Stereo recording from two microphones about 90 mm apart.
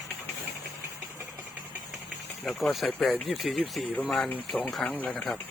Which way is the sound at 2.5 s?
Centre (ahead or behind).